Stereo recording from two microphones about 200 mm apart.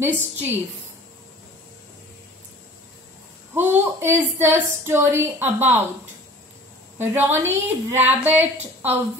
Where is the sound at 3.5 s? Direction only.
10° right (ahead or behind).